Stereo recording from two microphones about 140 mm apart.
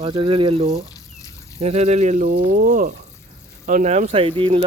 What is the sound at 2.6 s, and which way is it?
Speech, 85° right.